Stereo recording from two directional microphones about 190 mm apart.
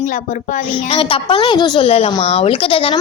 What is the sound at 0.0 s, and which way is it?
A woman's voice, 40° left (ahead or behind).